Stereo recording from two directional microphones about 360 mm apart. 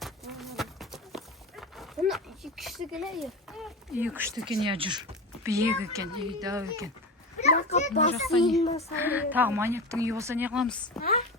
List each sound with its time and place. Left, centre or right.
0.0 s a sound: centre
7.4 s a child's voice: centre
9.0 s a woman's voice: centre